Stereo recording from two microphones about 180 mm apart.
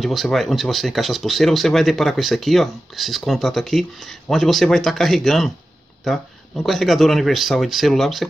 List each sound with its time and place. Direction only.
0.0 s speech: centre (ahead or behind)